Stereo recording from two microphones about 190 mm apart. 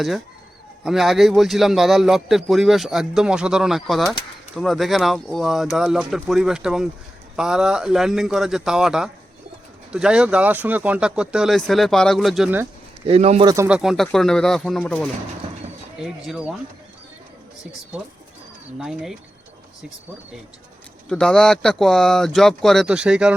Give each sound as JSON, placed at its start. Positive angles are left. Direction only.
{"t": 0.9, "sound": "a man's voice", "side_deg": 0}
{"t": 13.1, "sound": "speech", "side_deg": -35}
{"t": 13.4, "sound": "speech", "side_deg": -20}
{"t": 13.7, "sound": "a man's voice", "side_deg": -5}
{"t": 18.8, "sound": "a man's voice", "side_deg": 0}
{"t": 21.1, "sound": "a man's voice", "side_deg": 5}